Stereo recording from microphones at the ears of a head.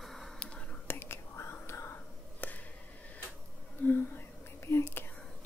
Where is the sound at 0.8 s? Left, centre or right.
Left.